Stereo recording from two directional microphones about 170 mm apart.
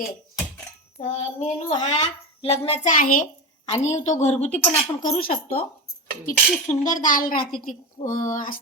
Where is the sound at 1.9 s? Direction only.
35° left (ahead or behind).